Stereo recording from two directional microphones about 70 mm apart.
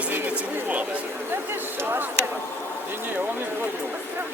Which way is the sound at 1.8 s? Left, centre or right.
Right.